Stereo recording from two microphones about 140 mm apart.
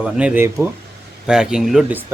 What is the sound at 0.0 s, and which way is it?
Speech, 5° right (ahead or behind).